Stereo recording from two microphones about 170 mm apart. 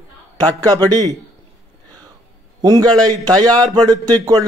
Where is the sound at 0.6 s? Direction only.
25° right (ahead or behind).